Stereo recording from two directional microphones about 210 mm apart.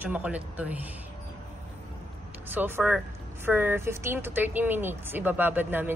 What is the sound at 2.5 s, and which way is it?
Speech, 10° right (ahead or behind).